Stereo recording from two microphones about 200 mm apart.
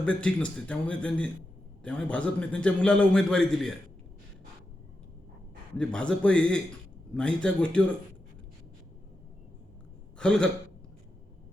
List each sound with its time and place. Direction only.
0.0 s a man's voice: 5° left (ahead or behind)
5.7 s a man's voice: 5° left (ahead or behind)
10.2 s a man's voice: 5° left (ahead or behind)